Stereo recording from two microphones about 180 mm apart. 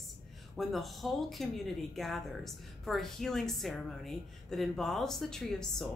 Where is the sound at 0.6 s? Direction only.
Centre (ahead or behind).